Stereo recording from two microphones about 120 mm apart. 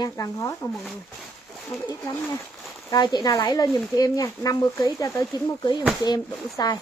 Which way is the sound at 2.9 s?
35° left (ahead or behind).